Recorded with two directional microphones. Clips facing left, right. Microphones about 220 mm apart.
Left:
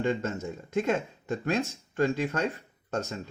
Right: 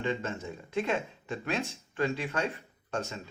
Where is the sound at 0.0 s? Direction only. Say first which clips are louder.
Left 4 dB; 45° left (ahead or behind).